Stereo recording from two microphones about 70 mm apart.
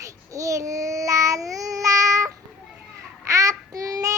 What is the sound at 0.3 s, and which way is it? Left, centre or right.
Child singing, right.